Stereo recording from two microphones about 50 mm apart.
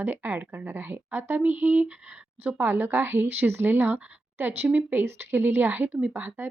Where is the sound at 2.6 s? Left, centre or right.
Right.